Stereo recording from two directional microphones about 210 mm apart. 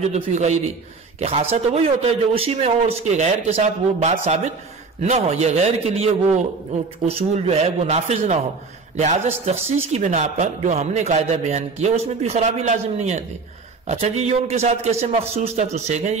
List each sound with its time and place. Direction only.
0.0 s a man's voice: 30° right (ahead or behind)